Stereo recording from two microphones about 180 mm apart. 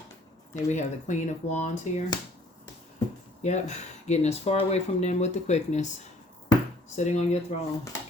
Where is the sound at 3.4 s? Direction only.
40° left (ahead or behind).